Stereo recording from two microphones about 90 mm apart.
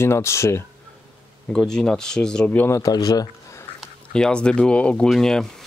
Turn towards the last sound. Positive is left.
turn(degrees=5)  # may be behind; listen again after turning